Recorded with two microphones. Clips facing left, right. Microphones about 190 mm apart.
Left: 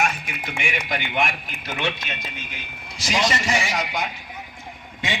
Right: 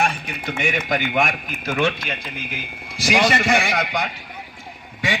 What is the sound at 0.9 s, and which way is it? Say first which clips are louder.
Speech: right 3 dB; 45° right (ahead or behind).